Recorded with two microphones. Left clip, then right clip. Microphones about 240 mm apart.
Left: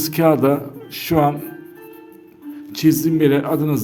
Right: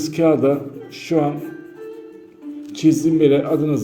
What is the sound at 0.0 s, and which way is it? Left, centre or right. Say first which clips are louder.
A man's voice: left 1 dB; left.